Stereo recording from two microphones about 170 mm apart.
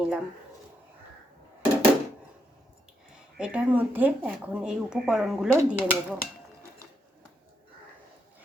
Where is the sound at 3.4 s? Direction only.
10° right (ahead or behind).